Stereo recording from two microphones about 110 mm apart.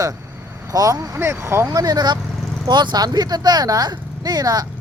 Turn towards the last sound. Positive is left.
turn(degrees=-35)  # may be behind; listen again after turning